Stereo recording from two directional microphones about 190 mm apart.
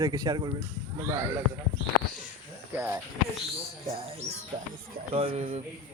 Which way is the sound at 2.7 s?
15° right (ahead or behind).